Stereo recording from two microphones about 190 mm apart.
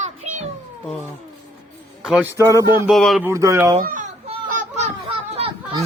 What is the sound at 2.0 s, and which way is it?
Speech, 5° right (ahead or behind).